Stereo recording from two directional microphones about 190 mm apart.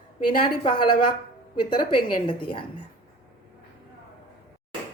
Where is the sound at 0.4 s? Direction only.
25° left (ahead or behind).